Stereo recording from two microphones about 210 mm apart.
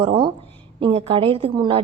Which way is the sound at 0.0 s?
25° right (ahead or behind).